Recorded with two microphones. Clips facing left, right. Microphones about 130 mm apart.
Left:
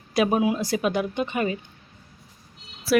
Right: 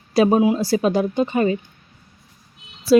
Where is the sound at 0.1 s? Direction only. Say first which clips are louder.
Right 6 dB; 30° right (ahead or behind).